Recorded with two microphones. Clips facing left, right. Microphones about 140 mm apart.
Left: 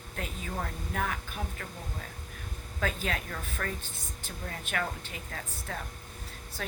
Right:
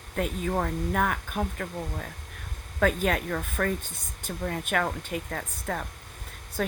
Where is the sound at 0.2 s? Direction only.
60° right (ahead or behind).